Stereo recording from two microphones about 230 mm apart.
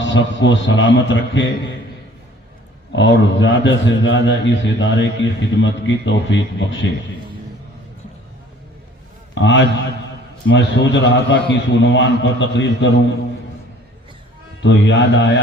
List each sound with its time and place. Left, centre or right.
0.0 s a man's voice: left
2.9 s a man's voice: left
9.3 s a man's voice: left
14.6 s a man's voice: left